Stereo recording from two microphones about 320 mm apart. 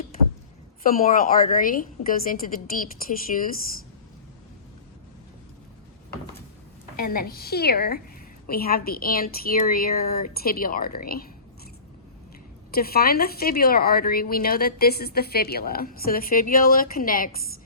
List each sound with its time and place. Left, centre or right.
0.8 s a woman's voice: left
6.9 s a woman's voice: left
12.7 s a woman's voice: left